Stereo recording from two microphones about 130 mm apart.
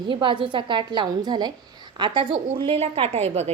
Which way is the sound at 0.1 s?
40° right (ahead or behind).